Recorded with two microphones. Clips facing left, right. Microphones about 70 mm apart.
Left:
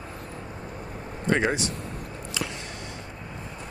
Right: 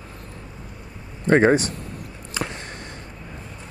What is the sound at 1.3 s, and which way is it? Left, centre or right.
Speech, right.